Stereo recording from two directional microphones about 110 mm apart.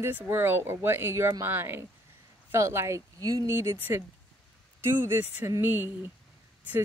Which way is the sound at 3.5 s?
20° right (ahead or behind).